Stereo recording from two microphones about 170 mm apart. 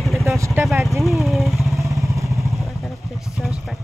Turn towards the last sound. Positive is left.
turn(degrees=0)  # may be behind; listen again after turning